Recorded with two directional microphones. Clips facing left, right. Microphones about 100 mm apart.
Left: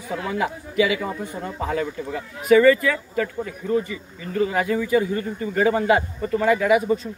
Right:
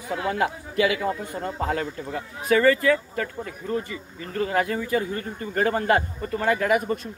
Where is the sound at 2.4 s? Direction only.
40° right (ahead or behind).